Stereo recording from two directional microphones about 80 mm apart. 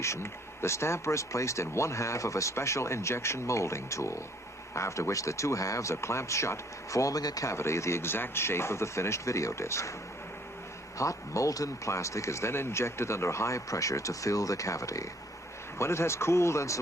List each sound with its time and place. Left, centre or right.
0.0 s speech: left
10.9 s speech: left